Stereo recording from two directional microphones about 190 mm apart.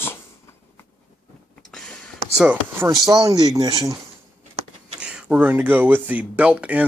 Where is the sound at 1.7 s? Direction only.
5° left (ahead or behind).